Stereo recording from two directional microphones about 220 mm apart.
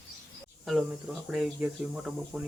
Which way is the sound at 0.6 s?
Centre (ahead or behind).